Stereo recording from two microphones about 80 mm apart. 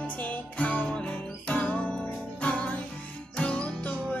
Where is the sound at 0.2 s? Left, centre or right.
Centre.